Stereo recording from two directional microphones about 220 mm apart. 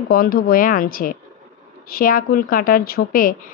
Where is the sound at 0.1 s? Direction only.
40° left (ahead or behind).